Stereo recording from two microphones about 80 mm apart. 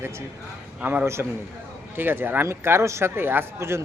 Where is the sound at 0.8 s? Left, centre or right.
Right.